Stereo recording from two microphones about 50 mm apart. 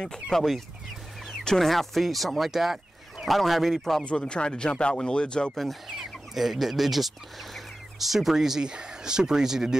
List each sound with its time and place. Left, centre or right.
0.0 s speech: centre
4.0 s speech: left
5.5 s speech: centre